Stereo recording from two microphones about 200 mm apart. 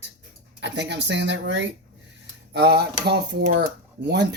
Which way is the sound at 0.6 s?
60° right (ahead or behind).